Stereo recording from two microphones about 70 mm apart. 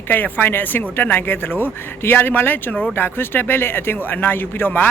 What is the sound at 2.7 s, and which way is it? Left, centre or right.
Speech, centre.